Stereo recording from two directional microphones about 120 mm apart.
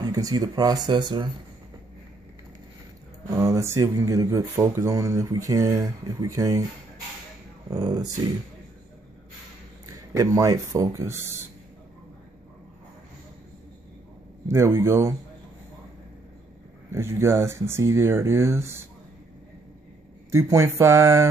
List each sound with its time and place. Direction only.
0.0 s speech: 30° right (ahead or behind)
3.3 s speech: 25° right (ahead or behind)
7.7 s speech: 30° right (ahead or behind)
9.8 s speech: 30° right (ahead or behind)
14.5 s speech: 20° right (ahead or behind)
16.9 s speech: 20° right (ahead or behind)
20.2 s speech: 25° right (ahead or behind)